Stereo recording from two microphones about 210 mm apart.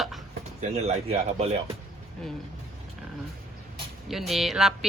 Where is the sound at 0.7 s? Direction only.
30° right (ahead or behind).